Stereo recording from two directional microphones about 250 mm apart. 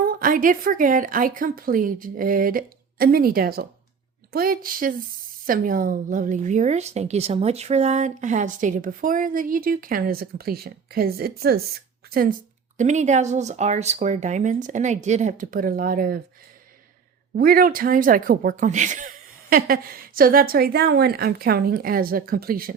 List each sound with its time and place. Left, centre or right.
0.0 s a woman's voice: right
17.3 s a woman's voice: right